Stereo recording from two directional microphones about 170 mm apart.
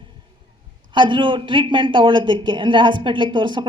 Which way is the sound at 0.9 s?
30° right (ahead or behind).